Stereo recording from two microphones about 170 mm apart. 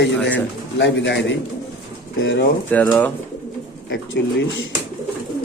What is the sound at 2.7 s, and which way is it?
Speech, 10° left (ahead or behind).